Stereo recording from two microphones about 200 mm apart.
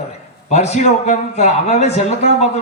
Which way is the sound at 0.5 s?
35° left (ahead or behind).